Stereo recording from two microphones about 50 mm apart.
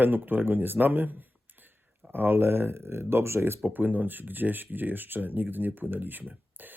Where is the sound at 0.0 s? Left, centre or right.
Right.